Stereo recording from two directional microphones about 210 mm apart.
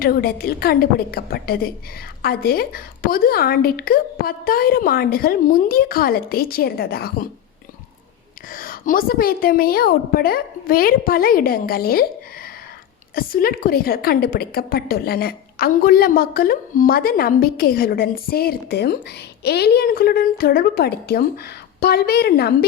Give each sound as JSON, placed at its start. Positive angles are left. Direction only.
{"t": 0.0, "sound": "a woman's voice", "side_deg": 45}
{"t": 8.5, "sound": "a woman's voice", "side_deg": 40}
{"t": 13.1, "sound": "a woman's voice", "side_deg": 45}